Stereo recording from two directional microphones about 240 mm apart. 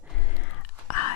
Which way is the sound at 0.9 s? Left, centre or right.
Left.